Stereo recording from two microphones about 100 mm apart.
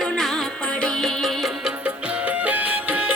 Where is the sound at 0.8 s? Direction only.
5° left (ahead or behind).